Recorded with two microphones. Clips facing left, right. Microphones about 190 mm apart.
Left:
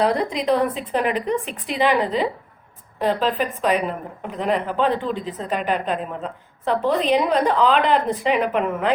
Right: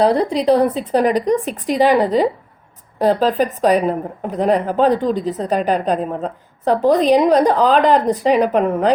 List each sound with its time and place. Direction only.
0.0 s a woman's voice: 35° right (ahead or behind)